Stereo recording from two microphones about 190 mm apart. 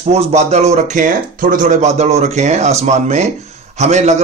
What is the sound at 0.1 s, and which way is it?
A man's voice, 35° right (ahead or behind).